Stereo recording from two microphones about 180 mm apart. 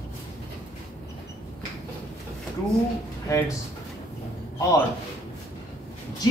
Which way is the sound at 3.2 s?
15° left (ahead or behind).